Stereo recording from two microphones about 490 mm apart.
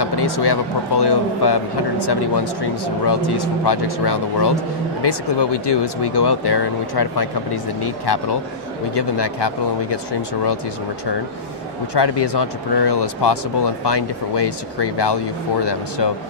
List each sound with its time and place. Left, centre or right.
0.0 s a man's voice: left
11.9 s a man's voice: left